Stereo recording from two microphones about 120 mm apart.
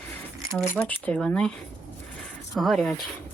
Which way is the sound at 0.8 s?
10° left (ahead or behind).